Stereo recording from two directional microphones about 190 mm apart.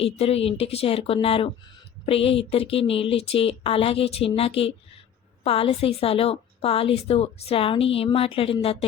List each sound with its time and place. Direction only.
0.0 s a woman's voice: 30° left (ahead or behind)